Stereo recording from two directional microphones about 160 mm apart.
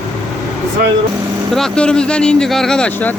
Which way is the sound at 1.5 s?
5° left (ahead or behind).